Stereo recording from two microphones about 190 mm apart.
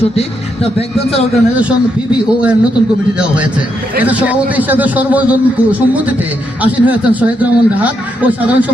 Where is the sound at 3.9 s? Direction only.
10° right (ahead or behind).